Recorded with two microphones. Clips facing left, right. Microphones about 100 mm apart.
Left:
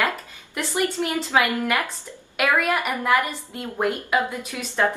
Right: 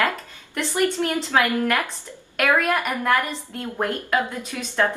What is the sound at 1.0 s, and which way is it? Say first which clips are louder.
A woman's voice: even; 10° left (ahead or behind).